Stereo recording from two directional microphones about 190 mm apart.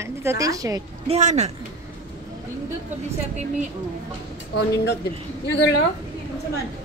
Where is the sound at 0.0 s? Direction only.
15° right (ahead or behind).